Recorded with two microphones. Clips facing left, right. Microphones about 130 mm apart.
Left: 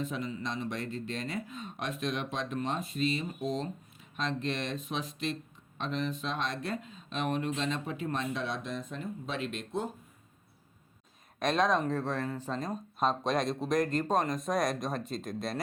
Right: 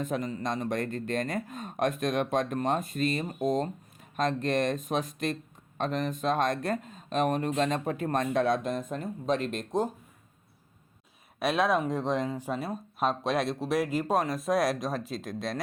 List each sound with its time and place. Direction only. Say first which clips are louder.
0.0 s speech: right 4 dB; 45° right (ahead or behind)
11.3 s speech: right 2 dB; 5° right (ahead or behind)